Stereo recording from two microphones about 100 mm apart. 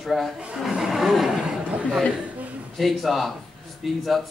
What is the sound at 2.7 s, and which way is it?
A man's voice, centre (ahead or behind).